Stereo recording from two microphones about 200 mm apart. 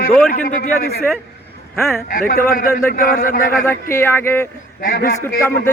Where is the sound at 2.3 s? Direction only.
45° left (ahead or behind).